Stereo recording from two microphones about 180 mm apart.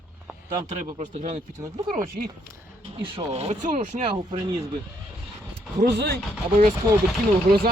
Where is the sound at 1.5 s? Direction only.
20° right (ahead or behind).